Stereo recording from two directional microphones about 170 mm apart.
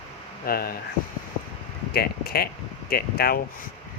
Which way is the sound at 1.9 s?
65° left (ahead or behind).